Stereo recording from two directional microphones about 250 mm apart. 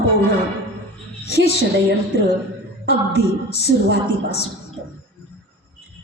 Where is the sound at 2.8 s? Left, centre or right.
Left.